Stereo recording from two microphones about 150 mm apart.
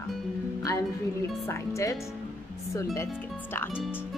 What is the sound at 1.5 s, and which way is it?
Speech, 20° left (ahead or behind).